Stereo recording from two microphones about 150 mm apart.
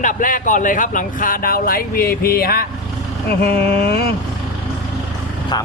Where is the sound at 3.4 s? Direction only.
90° left.